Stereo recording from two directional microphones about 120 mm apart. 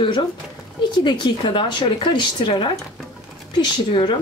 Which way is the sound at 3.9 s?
40° left (ahead or behind).